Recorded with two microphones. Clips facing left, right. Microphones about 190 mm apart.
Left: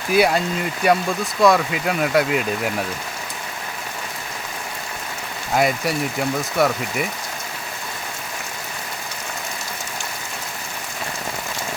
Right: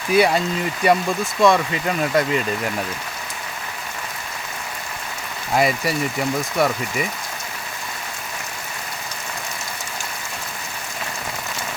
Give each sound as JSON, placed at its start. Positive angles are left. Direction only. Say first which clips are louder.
{"t": 0.1, "sound": "speech", "louder": "right 1 dB", "side_deg": 0}
{"t": 5.5, "sound": "speech", "louder": "even", "side_deg": 0}